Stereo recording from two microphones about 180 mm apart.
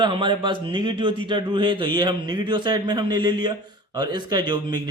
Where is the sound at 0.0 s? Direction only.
25° right (ahead or behind).